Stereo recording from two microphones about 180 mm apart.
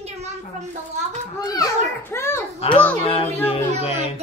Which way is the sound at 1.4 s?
20° left (ahead or behind).